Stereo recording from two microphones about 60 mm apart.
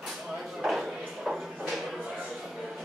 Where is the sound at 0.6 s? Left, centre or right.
Centre.